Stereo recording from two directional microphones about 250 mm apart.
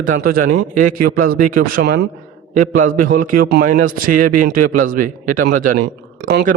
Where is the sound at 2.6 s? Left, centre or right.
Right.